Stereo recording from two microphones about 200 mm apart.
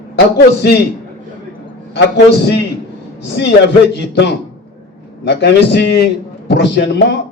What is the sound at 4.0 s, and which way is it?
A man's voice, 55° left (ahead or behind).